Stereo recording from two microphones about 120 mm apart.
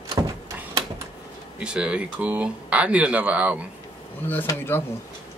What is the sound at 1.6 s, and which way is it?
Speech, 10° right (ahead or behind).